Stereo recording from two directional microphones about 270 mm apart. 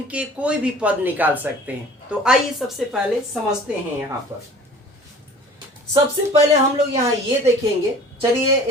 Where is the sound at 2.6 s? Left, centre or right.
Centre.